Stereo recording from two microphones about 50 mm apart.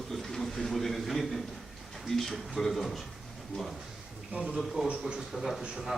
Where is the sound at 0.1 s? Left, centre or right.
Centre.